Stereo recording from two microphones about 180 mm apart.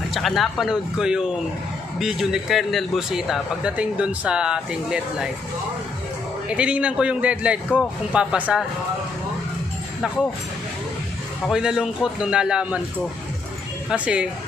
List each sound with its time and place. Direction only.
0.1 s speech: centre (ahead or behind)
6.5 s a man's voice: 5° right (ahead or behind)
11.4 s speech: 5° right (ahead or behind)
13.8 s speech: 5° right (ahead or behind)